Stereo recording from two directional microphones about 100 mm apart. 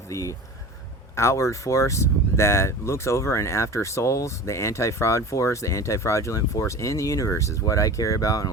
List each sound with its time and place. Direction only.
0.1 s speech: 35° left (ahead or behind)